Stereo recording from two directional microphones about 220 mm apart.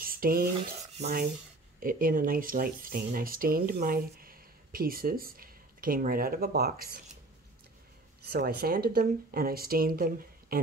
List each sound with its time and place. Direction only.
0.0 s dishes: 40° right (ahead or behind)
0.9 s rub: 30° right (ahead or behind)
1.8 s speech: 40° right (ahead or behind)
8.3 s speech: 45° right (ahead or behind)